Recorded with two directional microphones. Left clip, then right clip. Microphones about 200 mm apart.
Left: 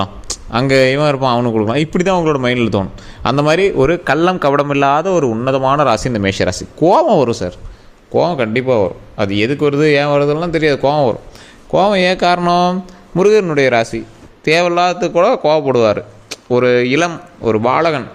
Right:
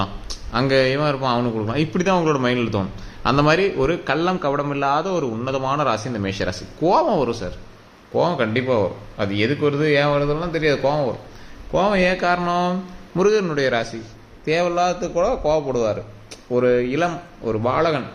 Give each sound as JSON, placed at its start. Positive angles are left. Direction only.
{"t": 0.0, "sound": "a man's voice", "side_deg": 35}
{"t": 5.9, "sound": "a man's voice", "side_deg": 45}